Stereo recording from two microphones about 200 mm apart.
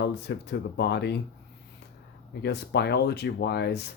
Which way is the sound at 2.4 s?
55° left (ahead or behind).